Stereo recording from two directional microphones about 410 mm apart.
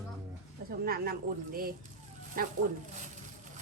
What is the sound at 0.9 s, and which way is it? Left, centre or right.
Speech, right.